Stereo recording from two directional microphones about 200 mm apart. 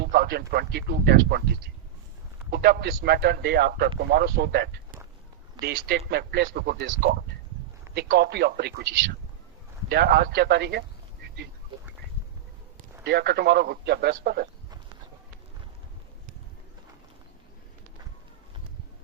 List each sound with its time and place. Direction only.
0.0 s speech: 50° right (ahead or behind)
6.8 s speech: 65° right (ahead or behind)
7.9 s speech: 55° right (ahead or behind)
9.9 s speech: 50° right (ahead or behind)
13.1 s speech: 55° right (ahead or behind)